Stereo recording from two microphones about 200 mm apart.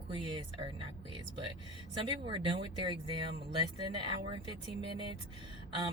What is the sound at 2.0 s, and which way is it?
Speech, 25° right (ahead or behind).